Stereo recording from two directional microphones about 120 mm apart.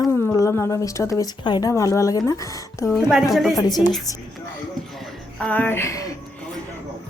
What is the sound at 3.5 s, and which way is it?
Speech, 35° left (ahead or behind).